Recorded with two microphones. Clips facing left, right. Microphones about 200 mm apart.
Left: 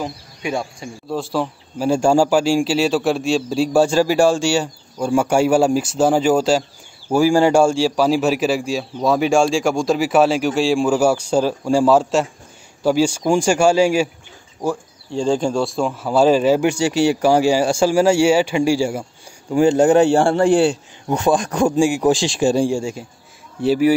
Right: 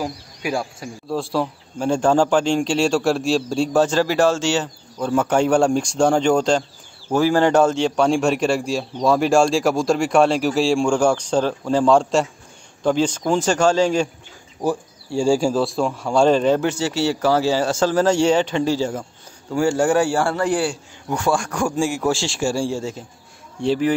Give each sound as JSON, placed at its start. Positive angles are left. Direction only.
{"t": 0.0, "sound": "a man's voice", "side_deg": -5}
{"t": 14.6, "sound": "a man's voice", "side_deg": -10}